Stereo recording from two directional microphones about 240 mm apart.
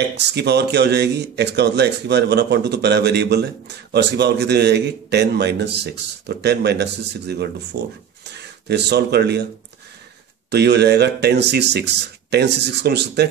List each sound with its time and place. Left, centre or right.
0.1 s speech: right
10.5 s speech: right